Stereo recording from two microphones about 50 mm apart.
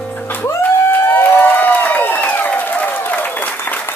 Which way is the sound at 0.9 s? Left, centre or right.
Left.